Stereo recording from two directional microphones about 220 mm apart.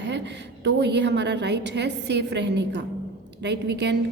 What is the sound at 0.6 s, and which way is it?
A woman's voice, 50° right (ahead or behind).